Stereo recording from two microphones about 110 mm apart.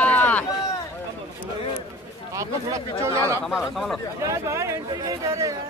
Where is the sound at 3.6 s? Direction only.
Centre (ahead or behind).